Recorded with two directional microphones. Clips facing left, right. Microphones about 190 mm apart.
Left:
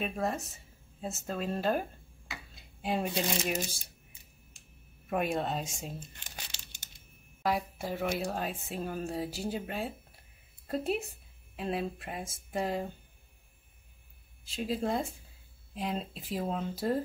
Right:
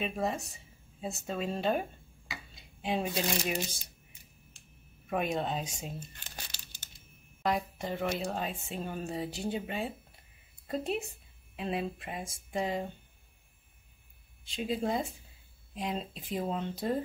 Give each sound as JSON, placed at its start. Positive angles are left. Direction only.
{"t": 0.0, "sound": "speech", "side_deg": 0}
{"t": 5.1, "sound": "speech", "side_deg": 0}
{"t": 6.1, "sound": "crumpling", "side_deg": 25}
{"t": 7.4, "sound": "speech", "side_deg": 5}
{"t": 14.4, "sound": "speech", "side_deg": 0}